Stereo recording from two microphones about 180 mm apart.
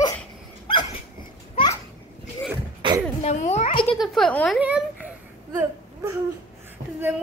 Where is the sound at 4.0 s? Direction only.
5° left (ahead or behind).